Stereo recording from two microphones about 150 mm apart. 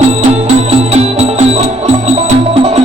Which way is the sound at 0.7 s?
45° right (ahead or behind).